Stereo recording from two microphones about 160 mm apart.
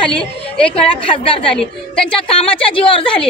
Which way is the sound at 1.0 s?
35° left (ahead or behind).